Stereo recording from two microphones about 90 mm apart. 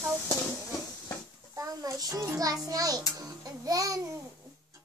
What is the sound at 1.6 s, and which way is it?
A child's voice, 40° right (ahead or behind).